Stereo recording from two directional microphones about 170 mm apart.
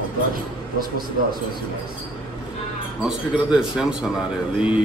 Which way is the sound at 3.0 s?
5° right (ahead or behind).